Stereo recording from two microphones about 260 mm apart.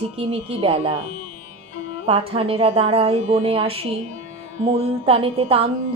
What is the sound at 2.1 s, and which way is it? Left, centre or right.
A woman's voice, right.